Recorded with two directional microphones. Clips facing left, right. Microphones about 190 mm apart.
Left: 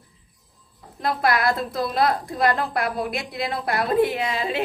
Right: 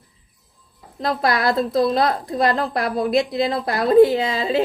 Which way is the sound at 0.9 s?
30° right (ahead or behind).